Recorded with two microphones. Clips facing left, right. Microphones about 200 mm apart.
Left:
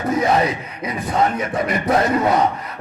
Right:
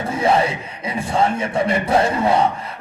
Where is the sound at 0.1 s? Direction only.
30° right (ahead or behind).